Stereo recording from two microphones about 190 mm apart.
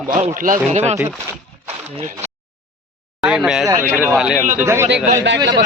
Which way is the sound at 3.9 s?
5° right (ahead or behind).